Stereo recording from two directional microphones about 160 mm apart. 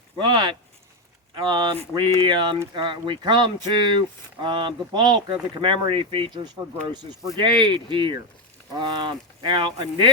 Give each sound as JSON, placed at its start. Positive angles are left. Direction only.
{"t": 0.2, "sound": "speech", "side_deg": -25}